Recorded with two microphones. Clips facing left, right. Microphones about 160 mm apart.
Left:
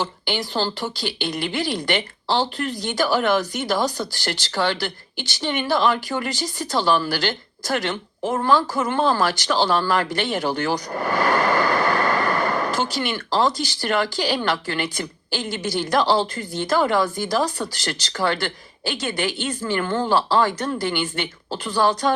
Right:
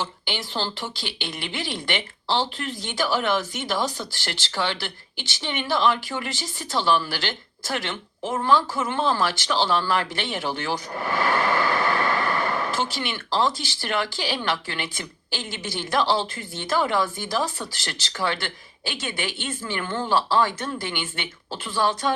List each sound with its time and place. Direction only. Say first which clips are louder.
0.0 s speech: left 5 dB; 40° left (ahead or behind)
11.1 s a sound: left 3 dB; 40° left (ahead or behind)
13.3 s speech: left 3 dB; 40° left (ahead or behind)